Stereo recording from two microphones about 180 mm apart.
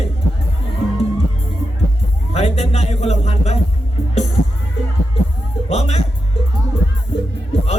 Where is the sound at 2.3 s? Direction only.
35° left (ahead or behind).